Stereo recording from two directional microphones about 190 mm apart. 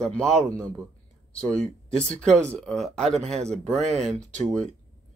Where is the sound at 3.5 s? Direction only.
5° left (ahead or behind).